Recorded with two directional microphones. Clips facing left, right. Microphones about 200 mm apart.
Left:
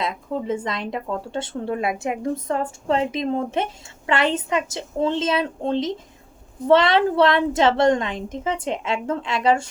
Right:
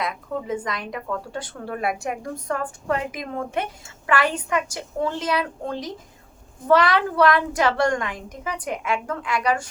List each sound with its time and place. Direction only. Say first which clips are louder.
0.0 s speech: left 2 dB; 25° left (ahead or behind)